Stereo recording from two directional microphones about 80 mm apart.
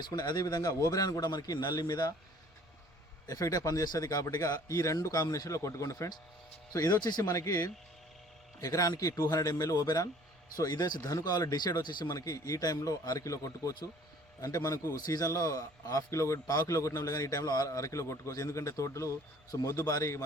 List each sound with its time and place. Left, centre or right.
0.0 s a man's voice: left
3.2 s a man's voice: left
6.7 s a man's voice: left
12.1 s a man's voice: left